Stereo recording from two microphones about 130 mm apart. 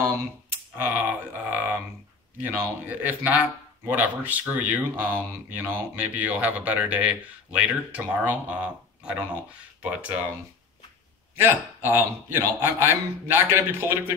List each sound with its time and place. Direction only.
0.7 s speech: 15° right (ahead or behind)
11.3 s speech: 15° right (ahead or behind)